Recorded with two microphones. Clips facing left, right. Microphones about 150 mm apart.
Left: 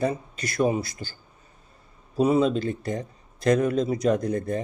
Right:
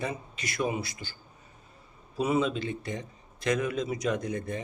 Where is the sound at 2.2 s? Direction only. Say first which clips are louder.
Left 6 dB; 35° left (ahead or behind).